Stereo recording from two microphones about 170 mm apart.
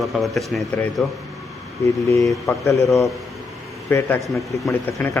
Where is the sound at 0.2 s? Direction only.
Centre (ahead or behind).